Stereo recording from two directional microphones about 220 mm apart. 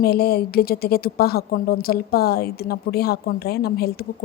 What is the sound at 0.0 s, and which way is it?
A woman's voice, 45° left (ahead or behind).